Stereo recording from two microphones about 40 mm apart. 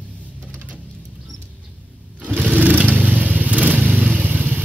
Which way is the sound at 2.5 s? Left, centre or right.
Right.